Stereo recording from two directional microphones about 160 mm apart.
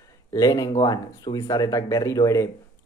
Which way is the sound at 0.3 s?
20° left (ahead or behind).